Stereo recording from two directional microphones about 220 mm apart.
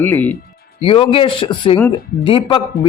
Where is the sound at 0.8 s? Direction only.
25° left (ahead or behind).